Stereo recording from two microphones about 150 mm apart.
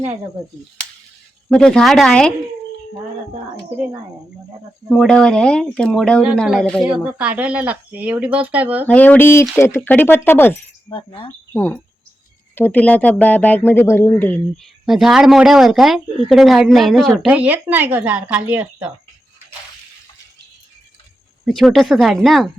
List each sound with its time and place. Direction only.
1.5 s speech: 5° left (ahead or behind)
4.9 s speech: centre (ahead or behind)
6.8 s speech: 10° right (ahead or behind)
8.9 s speech: 10° left (ahead or behind)
10.9 s speech: 40° left (ahead or behind)
11.5 s speech: 15° left (ahead or behind); by 18.9 s 10° right (ahead or behind)
21.4 s speech: centre (ahead or behind)